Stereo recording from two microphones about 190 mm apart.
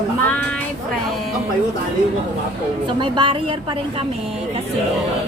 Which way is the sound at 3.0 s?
25° right (ahead or behind).